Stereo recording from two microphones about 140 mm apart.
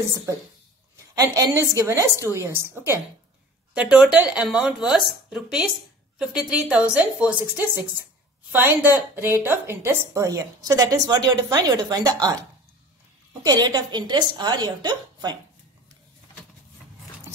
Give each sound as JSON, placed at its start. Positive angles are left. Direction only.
{"t": 1.1, "sound": "a woman's voice", "side_deg": -25}
{"t": 13.4, "sound": "a woman's voice", "side_deg": -30}